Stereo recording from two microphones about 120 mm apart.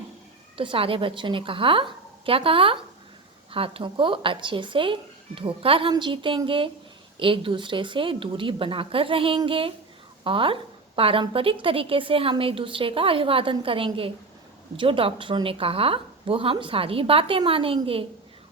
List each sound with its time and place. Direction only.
0.5 s a woman's voice: 50° right (ahead or behind)